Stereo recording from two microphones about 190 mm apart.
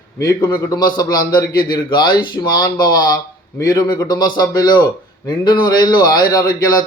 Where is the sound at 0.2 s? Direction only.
20° left (ahead or behind).